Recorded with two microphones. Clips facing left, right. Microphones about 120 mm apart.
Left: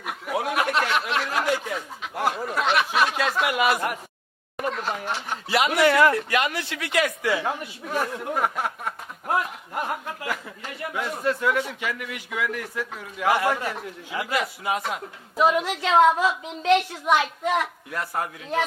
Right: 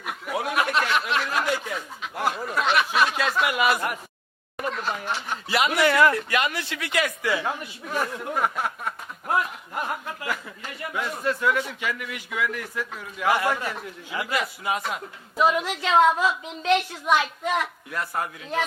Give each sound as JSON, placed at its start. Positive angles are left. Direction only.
{"t": 0.0, "sound": "a sound", "side_deg": 45}
{"t": 2.3, "sound": "speech", "side_deg": 35}
{"t": 2.6, "sound": "speech", "side_deg": 45}